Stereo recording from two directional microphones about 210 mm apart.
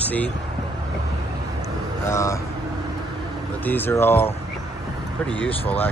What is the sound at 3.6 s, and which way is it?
Speech, 10° left (ahead or behind).